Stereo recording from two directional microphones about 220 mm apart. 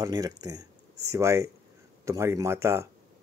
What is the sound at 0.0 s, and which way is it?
Speech, 15° right (ahead or behind).